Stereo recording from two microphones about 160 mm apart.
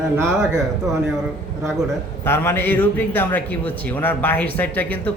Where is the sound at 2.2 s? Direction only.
15° left (ahead or behind).